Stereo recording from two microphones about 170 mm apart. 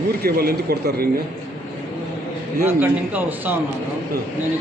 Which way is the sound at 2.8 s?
10° right (ahead or behind).